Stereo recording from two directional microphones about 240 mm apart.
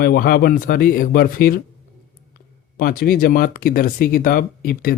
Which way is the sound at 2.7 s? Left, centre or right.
Left.